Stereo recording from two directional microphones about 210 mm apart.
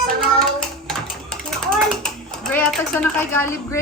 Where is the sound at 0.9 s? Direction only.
Centre (ahead or behind).